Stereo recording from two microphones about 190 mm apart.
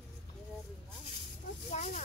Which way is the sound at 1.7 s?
40° left (ahead or behind).